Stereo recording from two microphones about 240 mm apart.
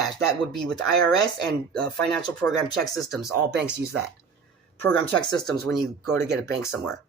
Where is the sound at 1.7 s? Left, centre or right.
Centre.